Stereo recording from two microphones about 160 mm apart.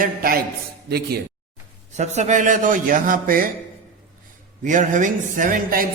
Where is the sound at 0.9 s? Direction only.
75° right (ahead or behind).